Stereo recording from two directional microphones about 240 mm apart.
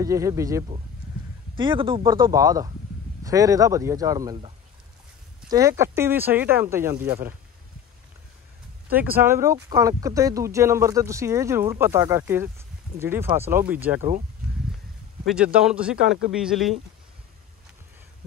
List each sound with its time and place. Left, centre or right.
0.0 s speech: centre
5.5 s speech: centre
8.8 s speech: centre
15.2 s speech: centre